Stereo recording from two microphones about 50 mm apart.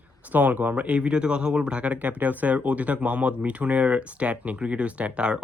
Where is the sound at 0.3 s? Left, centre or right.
Right.